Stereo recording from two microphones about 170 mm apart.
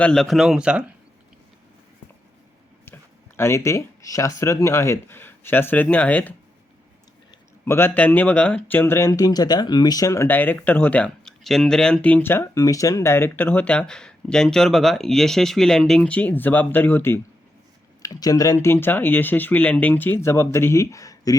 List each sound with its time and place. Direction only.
0.0 s speech: 5° left (ahead or behind)
2.8 s a sound: 15° left (ahead or behind)
4.4 s speech: 15° left (ahead or behind)
7.6 s speech: 15° left (ahead or behind)